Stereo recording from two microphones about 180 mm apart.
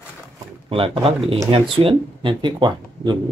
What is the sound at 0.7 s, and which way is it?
Speech, 30° right (ahead or behind).